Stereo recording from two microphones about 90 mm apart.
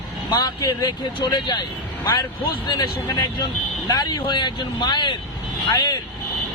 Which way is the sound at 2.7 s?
45° left (ahead or behind).